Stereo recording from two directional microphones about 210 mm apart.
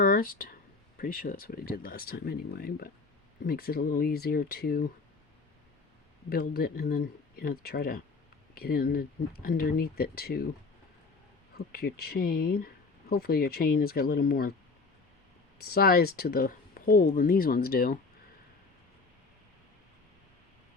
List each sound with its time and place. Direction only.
0.0 s speech: 40° left (ahead or behind)
6.3 s speech: 45° left (ahead or behind)
11.5 s speech: 45° left (ahead or behind)
15.6 s speech: 45° left (ahead or behind)